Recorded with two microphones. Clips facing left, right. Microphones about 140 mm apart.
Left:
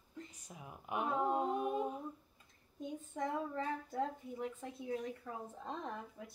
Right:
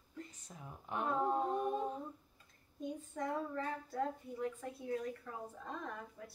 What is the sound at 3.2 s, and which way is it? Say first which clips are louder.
A woman's voice: left 1 dB; 20° left (ahead or behind).